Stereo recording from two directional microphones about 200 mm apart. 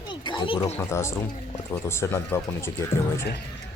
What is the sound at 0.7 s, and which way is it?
Speech, 15° left (ahead or behind).